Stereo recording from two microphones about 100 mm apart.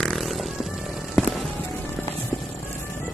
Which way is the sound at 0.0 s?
Centre (ahead or behind).